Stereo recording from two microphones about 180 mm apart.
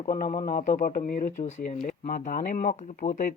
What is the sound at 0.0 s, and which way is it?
Speech, 40° left (ahead or behind).